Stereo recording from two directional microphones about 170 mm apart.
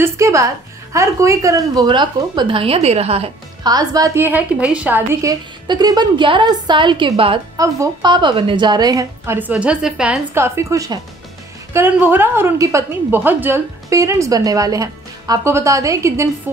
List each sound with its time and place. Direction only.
0.0 s a woman's voice: 15° right (ahead or behind); by 3.3 s 35° right (ahead or behind)
3.6 s a woman's voice: 20° right (ahead or behind)
7.5 s a woman's voice: 20° right (ahead or behind); by 10.2 s 5° right (ahead or behind)
10.3 s a woman's voice: 15° right (ahead or behind)